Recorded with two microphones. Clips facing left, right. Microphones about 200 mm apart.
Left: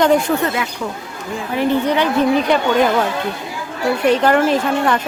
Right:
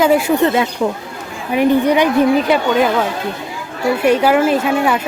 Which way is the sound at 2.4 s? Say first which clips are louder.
Right 1 dB; 5° right (ahead or behind).